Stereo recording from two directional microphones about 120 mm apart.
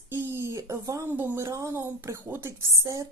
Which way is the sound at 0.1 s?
20° right (ahead or behind).